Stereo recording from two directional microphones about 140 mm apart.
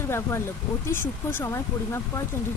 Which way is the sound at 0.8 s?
15° left (ahead or behind).